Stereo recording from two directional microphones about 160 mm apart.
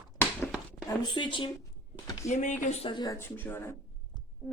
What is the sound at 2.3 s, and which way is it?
Speech, 50° left (ahead or behind).